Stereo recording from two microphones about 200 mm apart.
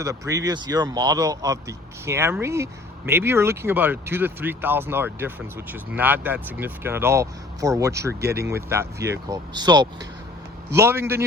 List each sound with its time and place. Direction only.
0.0 s speech: 15° right (ahead or behind)
8.2 s speech: 50° right (ahead or behind)
8.4 s speech: 15° right (ahead or behind)